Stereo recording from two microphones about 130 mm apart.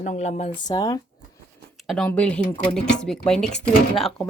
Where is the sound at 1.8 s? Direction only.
5° left (ahead or behind).